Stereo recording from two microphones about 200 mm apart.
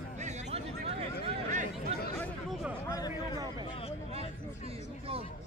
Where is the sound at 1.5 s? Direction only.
40° right (ahead or behind).